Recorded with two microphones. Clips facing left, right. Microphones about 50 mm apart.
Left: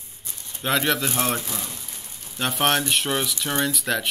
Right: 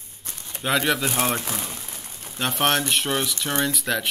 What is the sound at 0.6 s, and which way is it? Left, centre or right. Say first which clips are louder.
Speech: even; centre.